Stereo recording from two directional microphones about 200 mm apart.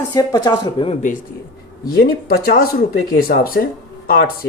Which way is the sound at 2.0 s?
50° left (ahead or behind).